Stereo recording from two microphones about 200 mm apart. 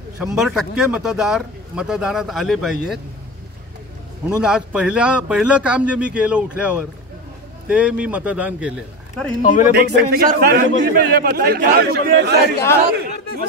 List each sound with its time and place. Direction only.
0.2 s speech: 5° right (ahead or behind)
4.4 s speech: 5° right (ahead or behind)
9.4 s speech: 40° left (ahead or behind)
9.8 s a man's voice: 50° right (ahead or behind)